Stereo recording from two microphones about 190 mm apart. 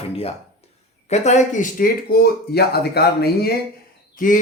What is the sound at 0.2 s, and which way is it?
Speech, 35° left (ahead or behind).